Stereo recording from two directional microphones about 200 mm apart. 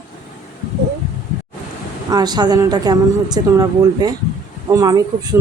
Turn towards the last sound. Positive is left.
turn(degrees=-20)  # may be behind; listen again after turning